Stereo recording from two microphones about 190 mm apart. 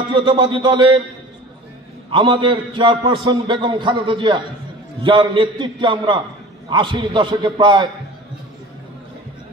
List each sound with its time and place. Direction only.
0.2 s a man's voice: 25° right (ahead or behind)
2.0 s a man's voice: 25° right (ahead or behind)